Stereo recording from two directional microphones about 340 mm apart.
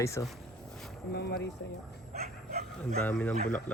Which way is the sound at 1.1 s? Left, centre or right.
Left.